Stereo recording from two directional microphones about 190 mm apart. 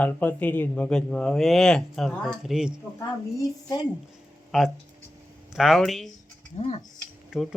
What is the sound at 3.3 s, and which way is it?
Speech, 20° left (ahead or behind).